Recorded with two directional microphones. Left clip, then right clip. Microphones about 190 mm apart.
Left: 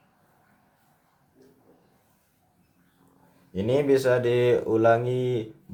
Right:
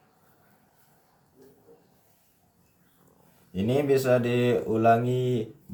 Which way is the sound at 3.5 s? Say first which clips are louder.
Left 2 dB; 40° left (ahead or behind).